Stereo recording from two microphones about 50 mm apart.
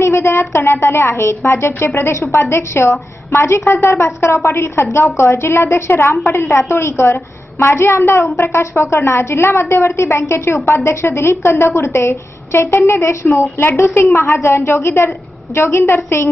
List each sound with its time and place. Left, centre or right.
0.0 s a woman's voice: left
8.0 s a woman's voice: left
13.6 s a woman's voice: left
15.8 s a woman's voice: left